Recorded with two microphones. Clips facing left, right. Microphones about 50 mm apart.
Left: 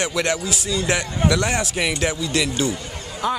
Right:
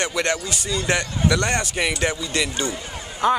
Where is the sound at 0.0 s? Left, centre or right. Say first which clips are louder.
Left 1 dB; centre.